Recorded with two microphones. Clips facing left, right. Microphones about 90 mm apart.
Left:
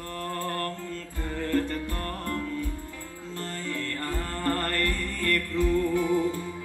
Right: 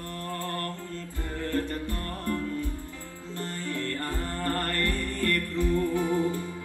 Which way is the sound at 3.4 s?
20° right (ahead or behind).